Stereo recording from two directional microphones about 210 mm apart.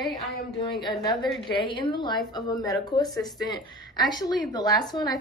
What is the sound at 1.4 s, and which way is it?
A woman's voice, 25° left (ahead or behind).